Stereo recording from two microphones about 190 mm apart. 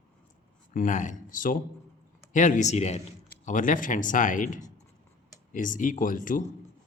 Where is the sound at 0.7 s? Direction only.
45° left (ahead or behind).